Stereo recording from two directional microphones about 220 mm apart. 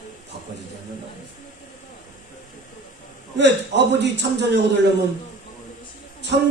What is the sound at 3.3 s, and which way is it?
A man's voice, 50° right (ahead or behind).